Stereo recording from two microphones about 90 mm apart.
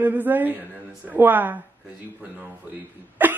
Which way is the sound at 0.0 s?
20° right (ahead or behind).